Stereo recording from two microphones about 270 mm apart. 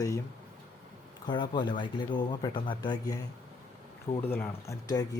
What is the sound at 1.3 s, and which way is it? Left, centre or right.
Speech, centre.